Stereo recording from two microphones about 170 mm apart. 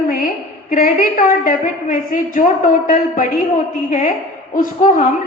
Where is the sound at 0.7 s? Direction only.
55° left (ahead or behind).